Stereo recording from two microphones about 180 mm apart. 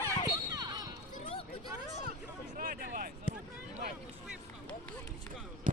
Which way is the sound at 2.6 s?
55° right (ahead or behind).